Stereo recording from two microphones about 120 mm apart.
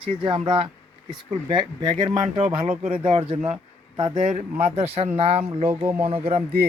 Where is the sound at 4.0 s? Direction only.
40° right (ahead or behind).